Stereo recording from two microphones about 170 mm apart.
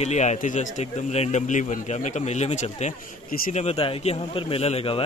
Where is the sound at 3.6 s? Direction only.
35° left (ahead or behind).